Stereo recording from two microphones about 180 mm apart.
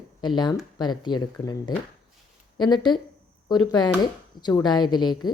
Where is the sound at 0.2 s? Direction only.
25° left (ahead or behind).